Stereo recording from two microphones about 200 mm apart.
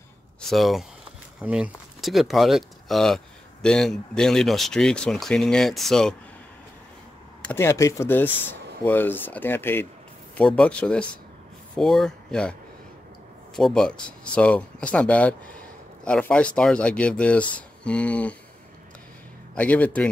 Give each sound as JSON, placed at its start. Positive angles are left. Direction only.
{"t": 0.4, "sound": "speech", "side_deg": 0}
{"t": 7.4, "sound": "speech", "side_deg": 15}
{"t": 13.6, "sound": "speech", "side_deg": 5}
{"t": 19.5, "sound": "speech", "side_deg": 5}